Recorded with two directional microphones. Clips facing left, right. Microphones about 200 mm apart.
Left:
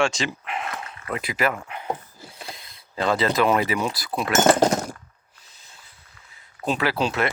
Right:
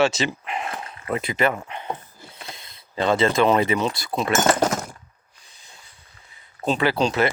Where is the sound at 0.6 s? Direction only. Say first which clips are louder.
Right 1 dB; 30° right (ahead or behind).